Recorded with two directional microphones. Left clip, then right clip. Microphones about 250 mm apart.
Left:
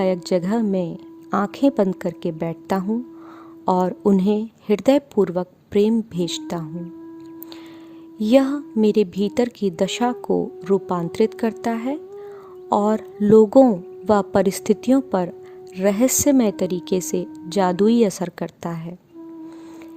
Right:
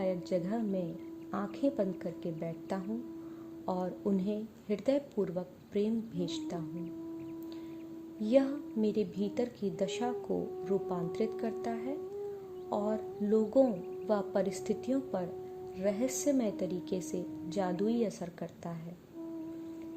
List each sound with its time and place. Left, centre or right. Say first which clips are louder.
0.0 s a woman's voice: left 13 dB; left
8.2 s a woman's voice: left 12 dB; left